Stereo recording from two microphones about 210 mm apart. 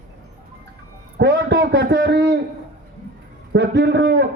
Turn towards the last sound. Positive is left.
turn(degrees=-55)  # may be behind; listen again after turning